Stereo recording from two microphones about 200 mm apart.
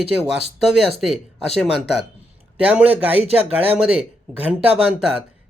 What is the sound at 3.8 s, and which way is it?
Speech, 5° right (ahead or behind).